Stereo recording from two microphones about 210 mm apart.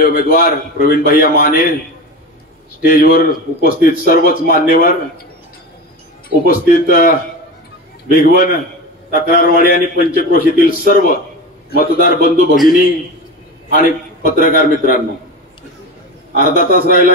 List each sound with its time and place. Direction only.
0.0 s a man's voice: 40° left (ahead or behind)
2.9 s a man's voice: 40° left (ahead or behind)
6.2 s a man's voice: 45° left (ahead or behind)
16.3 s a man's voice: 45° left (ahead or behind)